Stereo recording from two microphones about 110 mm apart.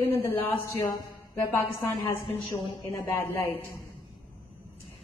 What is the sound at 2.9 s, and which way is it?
Speech, 20° left (ahead or behind).